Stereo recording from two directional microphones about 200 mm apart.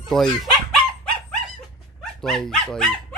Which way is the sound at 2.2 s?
5° left (ahead or behind).